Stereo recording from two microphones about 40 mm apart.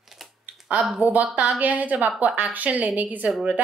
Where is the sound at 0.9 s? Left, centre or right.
Right.